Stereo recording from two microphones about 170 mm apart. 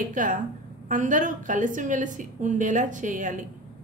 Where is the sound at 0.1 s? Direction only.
50° right (ahead or behind).